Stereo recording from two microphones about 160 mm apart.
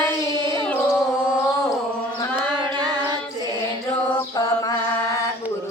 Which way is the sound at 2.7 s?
25° right (ahead or behind).